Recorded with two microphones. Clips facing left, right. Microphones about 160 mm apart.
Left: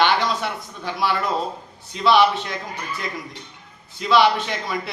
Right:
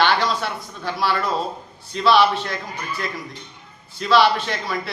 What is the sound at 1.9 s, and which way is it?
Speech, 15° left (ahead or behind).